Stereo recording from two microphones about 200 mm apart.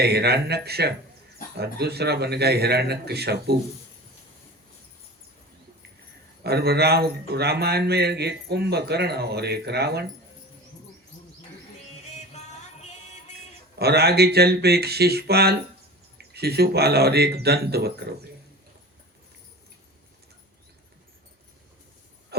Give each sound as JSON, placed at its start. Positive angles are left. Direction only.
{"t": 0.0, "sound": "speech", "side_deg": -55}
{"t": 6.4, "sound": "speech", "side_deg": -55}
{"t": 12.1, "sound": "music", "side_deg": 35}
{"t": 13.7, "sound": "speech", "side_deg": -55}
{"t": 22.3, "sound": "a sound", "side_deg": -55}